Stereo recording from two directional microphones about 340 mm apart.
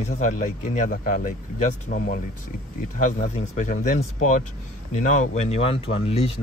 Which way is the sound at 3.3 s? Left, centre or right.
Left.